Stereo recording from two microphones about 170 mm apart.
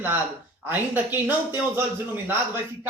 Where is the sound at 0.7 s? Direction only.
10° right (ahead or behind).